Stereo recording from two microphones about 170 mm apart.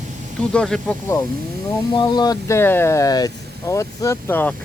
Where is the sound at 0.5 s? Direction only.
5° left (ahead or behind).